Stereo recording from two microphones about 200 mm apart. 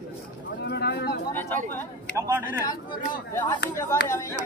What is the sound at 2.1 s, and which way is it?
Speech, 10° right (ahead or behind).